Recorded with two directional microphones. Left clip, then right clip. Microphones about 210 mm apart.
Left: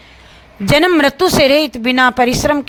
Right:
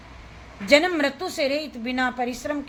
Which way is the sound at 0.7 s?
50° left (ahead or behind).